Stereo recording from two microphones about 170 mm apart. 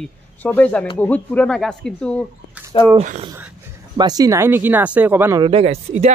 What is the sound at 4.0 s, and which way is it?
Speech, 20° right (ahead or behind).